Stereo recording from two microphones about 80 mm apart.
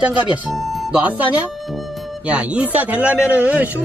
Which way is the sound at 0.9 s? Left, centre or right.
Centre.